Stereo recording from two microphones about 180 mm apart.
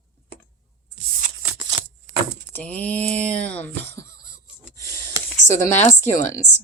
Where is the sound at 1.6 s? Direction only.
25° right (ahead or behind).